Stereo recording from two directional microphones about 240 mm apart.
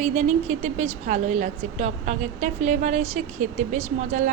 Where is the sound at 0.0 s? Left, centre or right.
Right.